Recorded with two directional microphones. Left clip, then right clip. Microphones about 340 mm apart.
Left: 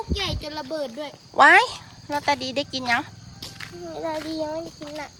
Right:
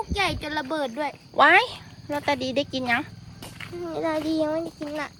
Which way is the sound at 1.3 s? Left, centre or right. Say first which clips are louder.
Left 3 dB; centre.